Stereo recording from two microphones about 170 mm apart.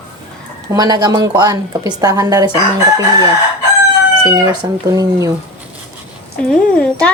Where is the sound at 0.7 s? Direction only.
20° right (ahead or behind).